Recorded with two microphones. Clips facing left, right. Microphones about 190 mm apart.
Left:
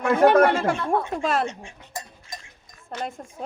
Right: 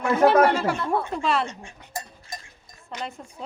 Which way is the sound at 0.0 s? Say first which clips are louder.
Left 1 dB; 50° left (ahead or behind).